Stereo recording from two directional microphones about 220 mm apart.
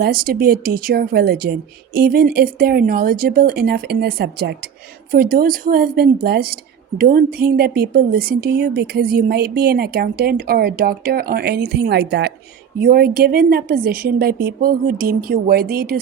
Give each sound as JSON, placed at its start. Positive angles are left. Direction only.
{"t": 0.0, "sound": "a woman's voice", "side_deg": -40}